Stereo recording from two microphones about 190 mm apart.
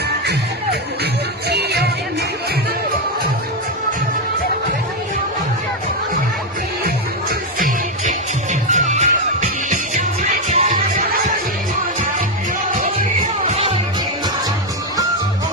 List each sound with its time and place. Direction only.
1.5 s music: 60° right (ahead or behind)
6.8 s music: 50° right (ahead or behind)
13.5 s music: 30° right (ahead or behind)